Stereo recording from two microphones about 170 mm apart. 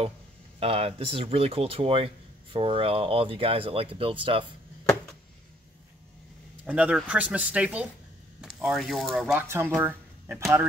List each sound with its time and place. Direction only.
0.6 s speech: 35° right (ahead or behind)
6.6 s speech: 5° right (ahead or behind)
9.4 s speech: 15° right (ahead or behind)
9.8 s a sound: 10° right (ahead or behind)